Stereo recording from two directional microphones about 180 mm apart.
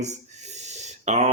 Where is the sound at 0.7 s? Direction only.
40° right (ahead or behind).